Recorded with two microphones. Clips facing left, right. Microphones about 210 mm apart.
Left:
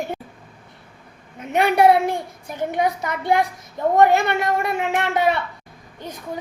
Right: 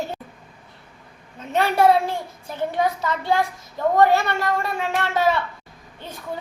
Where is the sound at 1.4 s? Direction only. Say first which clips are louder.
Left 2 dB; 15° left (ahead or behind).